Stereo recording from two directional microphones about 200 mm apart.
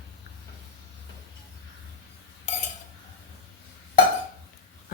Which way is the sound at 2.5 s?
35° left (ahead or behind).